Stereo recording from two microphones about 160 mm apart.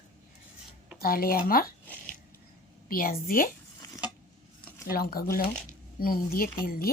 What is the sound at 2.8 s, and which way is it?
Speech, 65° left (ahead or behind).